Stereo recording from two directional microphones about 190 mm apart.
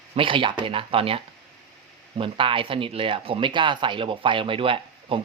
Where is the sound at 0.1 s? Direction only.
25° right (ahead or behind).